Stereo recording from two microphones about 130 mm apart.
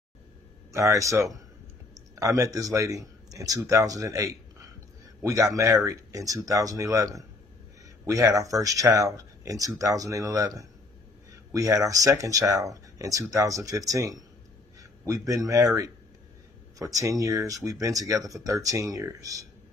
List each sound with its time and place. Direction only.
0.7 s speech: 25° right (ahead or behind)